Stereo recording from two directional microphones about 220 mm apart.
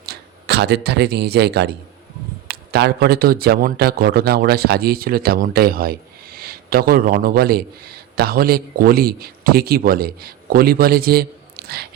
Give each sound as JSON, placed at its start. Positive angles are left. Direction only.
{"t": 0.0, "sound": "speech", "side_deg": -45}